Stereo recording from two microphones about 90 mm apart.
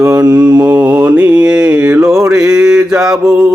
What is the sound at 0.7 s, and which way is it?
Mantra, 15° right (ahead or behind).